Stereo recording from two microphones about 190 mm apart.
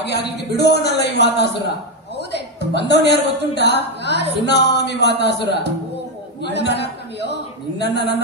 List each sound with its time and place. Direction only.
0.4 s speech: 60° left (ahead or behind)
2.1 s a sound: 60° left (ahead or behind)
2.9 s speech: 65° left (ahead or behind)